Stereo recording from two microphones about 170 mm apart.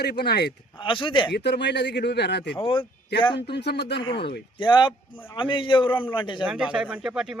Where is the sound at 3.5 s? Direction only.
75° left (ahead or behind).